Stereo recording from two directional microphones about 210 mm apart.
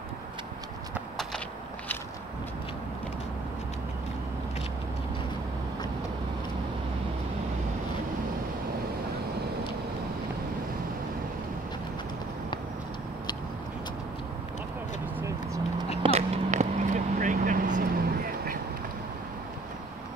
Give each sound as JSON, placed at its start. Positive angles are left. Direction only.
{"t": 15.1, "sound": "vehicle", "side_deg": -15}
{"t": 16.0, "sound": "vehicle", "side_deg": -30}